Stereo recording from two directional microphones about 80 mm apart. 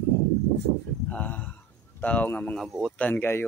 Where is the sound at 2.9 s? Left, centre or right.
Left.